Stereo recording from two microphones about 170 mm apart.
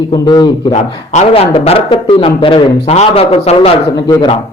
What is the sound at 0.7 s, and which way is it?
Speech, 40° left (ahead or behind).